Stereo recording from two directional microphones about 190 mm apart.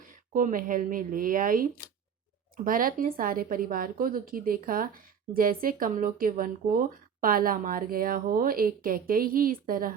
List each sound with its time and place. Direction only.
0.0 s speech: 45° right (ahead or behind)